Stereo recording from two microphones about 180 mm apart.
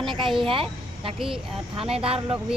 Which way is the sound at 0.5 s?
30° right (ahead or behind).